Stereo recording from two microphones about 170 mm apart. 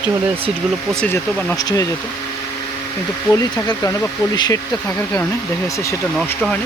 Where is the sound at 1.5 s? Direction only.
20° left (ahead or behind).